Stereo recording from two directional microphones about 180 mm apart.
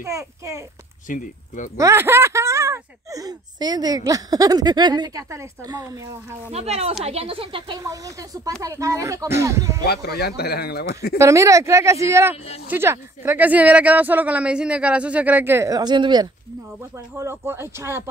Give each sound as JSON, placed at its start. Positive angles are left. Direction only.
{"t": 0.0, "sound": "speech", "side_deg": -15}
{"t": 1.0, "sound": "speech", "side_deg": 45}
{"t": 1.8, "sound": "speech", "side_deg": -15}
{"t": 6.5, "sound": "speech", "side_deg": -35}
{"t": 9.8, "sound": "speech", "side_deg": 65}
{"t": 11.1, "sound": "speech", "side_deg": -15}